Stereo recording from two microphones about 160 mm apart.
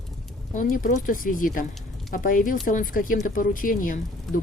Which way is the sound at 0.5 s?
55° left (ahead or behind).